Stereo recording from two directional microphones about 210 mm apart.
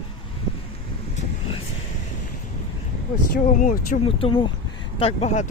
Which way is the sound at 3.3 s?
40° left (ahead or behind).